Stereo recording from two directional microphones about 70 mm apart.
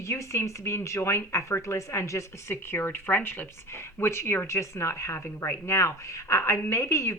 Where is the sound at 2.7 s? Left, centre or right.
Left.